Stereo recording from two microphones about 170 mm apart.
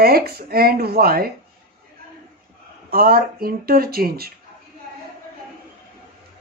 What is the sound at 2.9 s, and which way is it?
A woman's voice, 60° right (ahead or behind).